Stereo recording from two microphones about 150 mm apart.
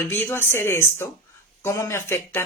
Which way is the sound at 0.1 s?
15° left (ahead or behind).